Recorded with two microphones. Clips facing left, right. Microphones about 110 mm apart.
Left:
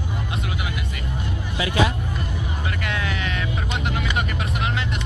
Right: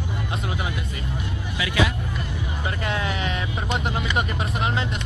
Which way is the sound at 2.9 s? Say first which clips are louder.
Right 2 dB; 35° right (ahead or behind).